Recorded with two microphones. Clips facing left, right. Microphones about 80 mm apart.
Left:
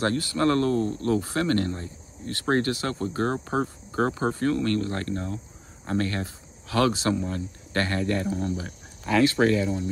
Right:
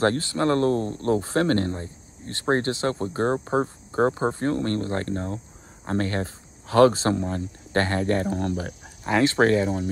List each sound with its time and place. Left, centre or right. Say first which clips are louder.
0.0 s speech: right 2 dB; right
8.4 s speech: right 2 dB; right
9.0 s speech: right 1 dB; right